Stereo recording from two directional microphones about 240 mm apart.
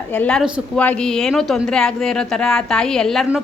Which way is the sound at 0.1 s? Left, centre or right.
Centre.